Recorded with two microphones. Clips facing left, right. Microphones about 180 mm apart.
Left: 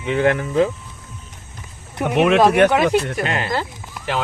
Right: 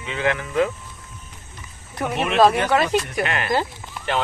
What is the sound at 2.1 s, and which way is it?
Speech, 65° left (ahead or behind).